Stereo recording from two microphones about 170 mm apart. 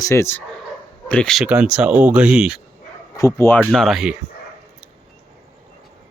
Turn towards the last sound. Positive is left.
turn(degrees=0)  # may be behind; listen again after turning